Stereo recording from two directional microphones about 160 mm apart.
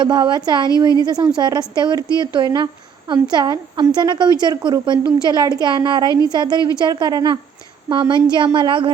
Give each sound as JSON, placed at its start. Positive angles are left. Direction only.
{"t": 0.0, "sound": "a woman's voice", "side_deg": -30}